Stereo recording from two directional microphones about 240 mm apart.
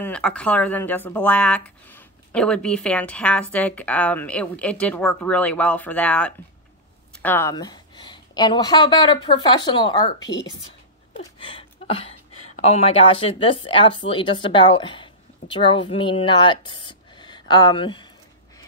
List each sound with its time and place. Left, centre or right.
0.0 s a woman's voice: centre